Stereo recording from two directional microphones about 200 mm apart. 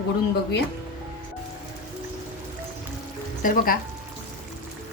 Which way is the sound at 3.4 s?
45° left (ahead or behind).